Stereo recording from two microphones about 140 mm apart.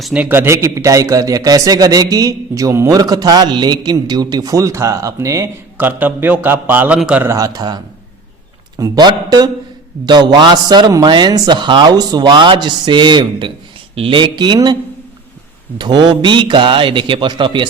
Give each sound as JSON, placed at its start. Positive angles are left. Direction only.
{"t": 0.0, "sound": "a man's voice", "side_deg": -10}
{"t": 7.3, "sound": "a man's voice", "side_deg": -25}
{"t": 8.8, "sound": "a man's voice", "side_deg": -30}
{"t": 15.8, "sound": "a man's voice", "side_deg": -30}